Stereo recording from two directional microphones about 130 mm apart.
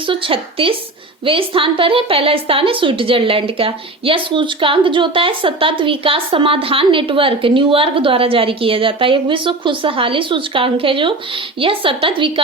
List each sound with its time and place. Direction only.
0.0 s a woman's voice: 40° right (ahead or behind)